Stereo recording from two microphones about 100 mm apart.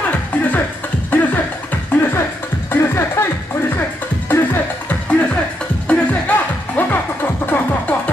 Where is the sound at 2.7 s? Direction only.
25° left (ahead or behind).